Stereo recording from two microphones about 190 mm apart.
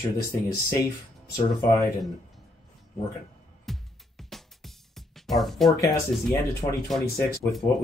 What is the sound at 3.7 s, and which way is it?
Music, centre (ahead or behind).